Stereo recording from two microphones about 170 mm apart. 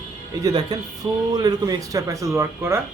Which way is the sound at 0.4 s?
20° right (ahead or behind).